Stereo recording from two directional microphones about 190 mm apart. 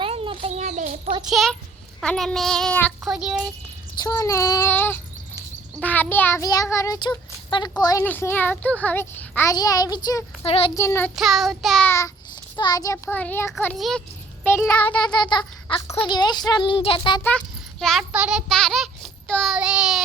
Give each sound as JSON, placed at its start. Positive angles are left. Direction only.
{"t": 0.0, "sound": "a sound", "side_deg": -30}
{"t": 1.3, "sound": "child singing", "side_deg": 0}
{"t": 4.0, "sound": "a child's voice", "side_deg": 15}
{"t": 10.4, "sound": "speech", "side_deg": 30}
{"t": 10.8, "sound": "a child's voice", "side_deg": 15}
{"t": 11.1, "sound": "child singing", "side_deg": 0}
{"t": 11.9, "sound": "a child's voice", "side_deg": 15}
{"t": 13.7, "sound": "child singing", "side_deg": 0}
{"t": 14.4, "sound": "a child's voice", "side_deg": 10}
{"t": 14.8, "sound": "speech", "side_deg": 25}
{"t": 17.2, "sound": "child singing", "side_deg": 5}